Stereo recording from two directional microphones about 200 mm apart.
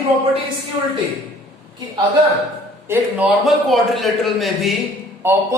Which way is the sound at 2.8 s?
10° right (ahead or behind).